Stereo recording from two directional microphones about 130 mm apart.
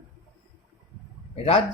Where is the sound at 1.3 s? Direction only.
50° left (ahead or behind).